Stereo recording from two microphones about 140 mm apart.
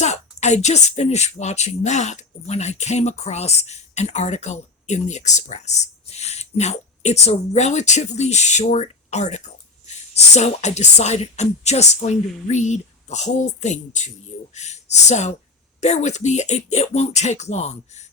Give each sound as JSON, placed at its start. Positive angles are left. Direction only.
{"t": 0.0, "sound": "a woman's voice", "side_deg": 55}